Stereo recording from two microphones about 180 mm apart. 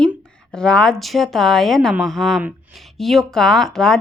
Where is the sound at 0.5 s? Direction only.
5° left (ahead or behind).